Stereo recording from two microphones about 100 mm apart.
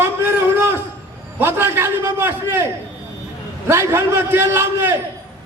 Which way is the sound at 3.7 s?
25° right (ahead or behind).